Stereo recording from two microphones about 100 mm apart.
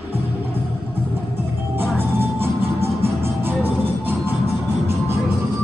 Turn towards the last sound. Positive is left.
turn(degrees=-25)  # may be behind; listen again after turning